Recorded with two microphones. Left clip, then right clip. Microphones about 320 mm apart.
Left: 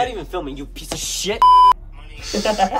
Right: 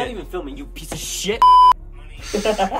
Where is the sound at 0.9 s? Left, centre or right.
Centre.